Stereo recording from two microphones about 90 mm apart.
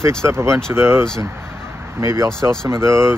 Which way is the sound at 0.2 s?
30° right (ahead or behind).